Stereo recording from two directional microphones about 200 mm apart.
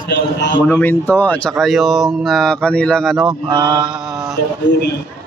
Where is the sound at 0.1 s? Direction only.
65° left (ahead or behind).